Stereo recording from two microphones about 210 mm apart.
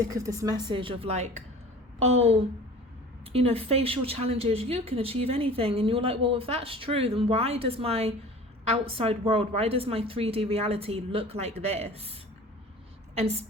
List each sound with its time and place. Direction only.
0.1 s speech: 15° right (ahead or behind)
13.1 s a woman's voice: 30° right (ahead or behind)